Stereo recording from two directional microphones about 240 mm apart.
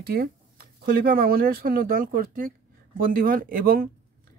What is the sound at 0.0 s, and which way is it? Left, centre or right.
Speech, right.